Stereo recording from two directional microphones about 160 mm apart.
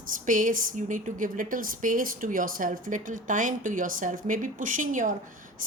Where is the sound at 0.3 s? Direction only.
55° right (ahead or behind).